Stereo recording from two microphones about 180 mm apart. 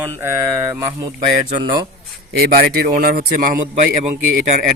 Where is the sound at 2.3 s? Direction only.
60° right (ahead or behind).